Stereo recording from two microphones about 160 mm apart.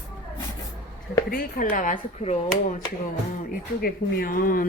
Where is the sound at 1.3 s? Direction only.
60° left (ahead or behind).